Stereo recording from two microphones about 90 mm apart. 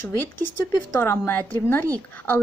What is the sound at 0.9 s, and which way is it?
A woman's voice, 30° left (ahead or behind).